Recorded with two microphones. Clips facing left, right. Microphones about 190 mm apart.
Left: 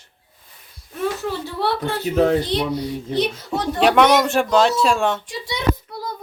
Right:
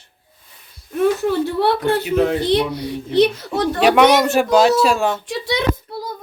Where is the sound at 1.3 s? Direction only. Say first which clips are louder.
Right 6 dB; 55° right (ahead or behind).